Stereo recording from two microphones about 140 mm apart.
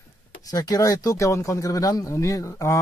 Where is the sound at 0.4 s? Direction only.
25° left (ahead or behind).